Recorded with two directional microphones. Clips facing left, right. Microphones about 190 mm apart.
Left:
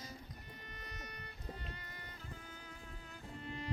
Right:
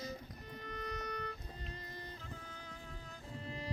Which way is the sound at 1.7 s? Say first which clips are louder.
Right 4 dB; 35° right (ahead or behind).